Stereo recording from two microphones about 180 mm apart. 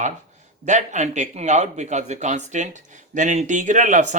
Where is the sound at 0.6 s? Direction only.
40° right (ahead or behind).